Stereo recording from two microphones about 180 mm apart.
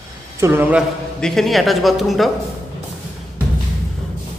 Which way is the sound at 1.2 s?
5° left (ahead or behind).